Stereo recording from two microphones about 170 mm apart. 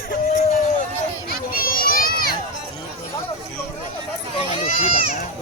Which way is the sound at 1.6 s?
60° left (ahead or behind).